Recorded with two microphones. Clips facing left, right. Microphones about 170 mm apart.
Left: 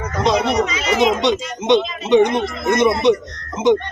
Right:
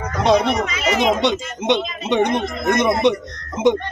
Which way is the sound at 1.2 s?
55° right (ahead or behind).